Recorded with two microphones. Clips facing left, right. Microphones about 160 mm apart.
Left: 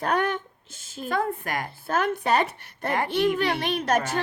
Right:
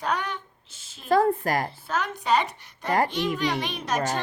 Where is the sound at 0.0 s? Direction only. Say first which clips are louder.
Left 4 dB; 50° left (ahead or behind).